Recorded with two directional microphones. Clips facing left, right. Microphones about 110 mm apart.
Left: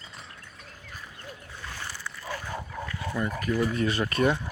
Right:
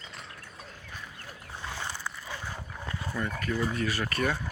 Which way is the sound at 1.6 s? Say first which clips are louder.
Right 2 dB; 20° right (ahead or behind).